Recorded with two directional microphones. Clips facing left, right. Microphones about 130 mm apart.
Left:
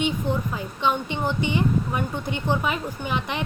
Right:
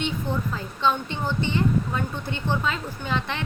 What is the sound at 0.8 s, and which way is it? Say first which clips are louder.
A woman's voice: even; 15° left (ahead or behind).